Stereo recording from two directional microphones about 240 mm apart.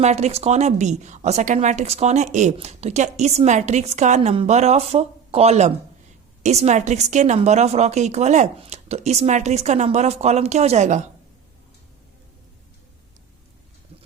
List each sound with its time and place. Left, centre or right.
0.0 s a woman's voice: right